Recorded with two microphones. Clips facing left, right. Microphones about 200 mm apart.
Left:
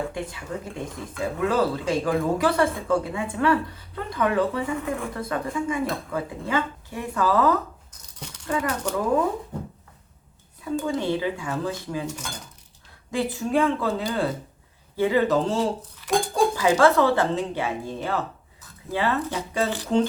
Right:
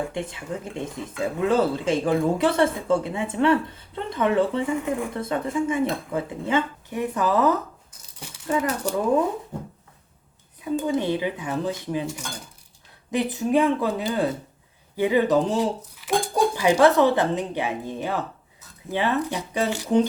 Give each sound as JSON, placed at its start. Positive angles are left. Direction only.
{"t": 0.1, "sound": "speech", "side_deg": -25}
{"t": 10.6, "sound": "speech", "side_deg": -20}
{"t": 13.1, "sound": "speech", "side_deg": -20}